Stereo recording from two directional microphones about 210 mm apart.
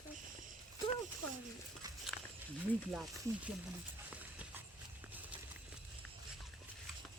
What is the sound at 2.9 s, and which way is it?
Speech, 5° right (ahead or behind).